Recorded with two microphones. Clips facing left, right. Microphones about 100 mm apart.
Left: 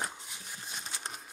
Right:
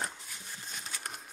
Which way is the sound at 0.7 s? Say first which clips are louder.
Left 1 dB; 20° left (ahead or behind).